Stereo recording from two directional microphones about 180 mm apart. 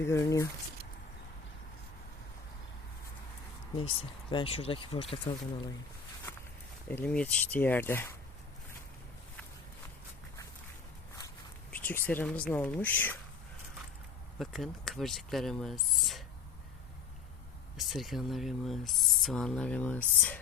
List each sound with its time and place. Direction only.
0.0 s speech: 15° left (ahead or behind)
3.8 s speech: 30° left (ahead or behind)
6.3 s a sound: 10° left (ahead or behind)
6.8 s speech: 10° left (ahead or behind)
11.7 s speech: 10° left (ahead or behind)
14.3 s speech: centre (ahead or behind)
17.7 s speech: centre (ahead or behind)